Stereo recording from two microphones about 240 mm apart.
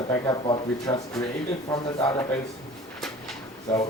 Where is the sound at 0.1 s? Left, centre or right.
Centre.